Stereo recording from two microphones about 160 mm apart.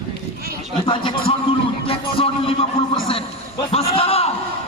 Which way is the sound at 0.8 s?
30° left (ahead or behind).